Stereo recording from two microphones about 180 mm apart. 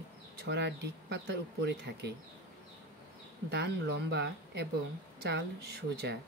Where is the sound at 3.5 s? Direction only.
65° right (ahead or behind).